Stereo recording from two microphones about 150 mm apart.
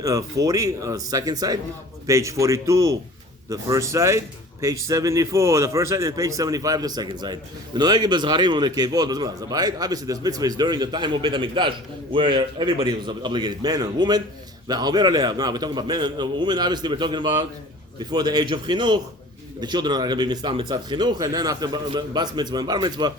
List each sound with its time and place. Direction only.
0.0 s speech: 25° right (ahead or behind)